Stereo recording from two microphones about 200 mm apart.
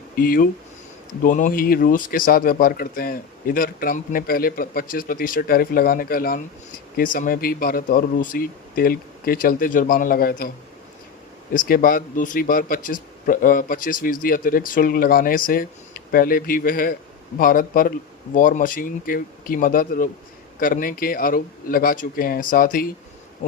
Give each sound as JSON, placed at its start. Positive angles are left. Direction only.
{"t": 0.2, "sound": "speech", "side_deg": 45}
{"t": 11.5, "sound": "speech", "side_deg": 45}